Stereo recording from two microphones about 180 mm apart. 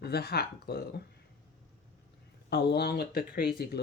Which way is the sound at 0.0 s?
60° left (ahead or behind).